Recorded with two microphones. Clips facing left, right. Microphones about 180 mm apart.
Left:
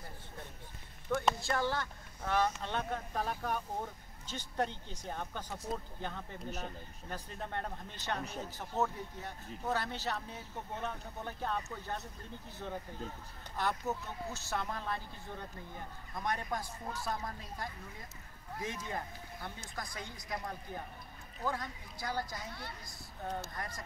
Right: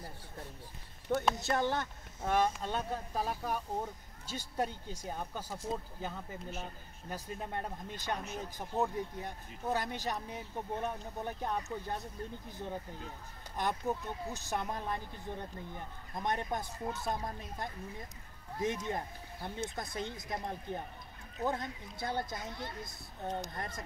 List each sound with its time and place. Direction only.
1.3 s speech: 20° right (ahead or behind)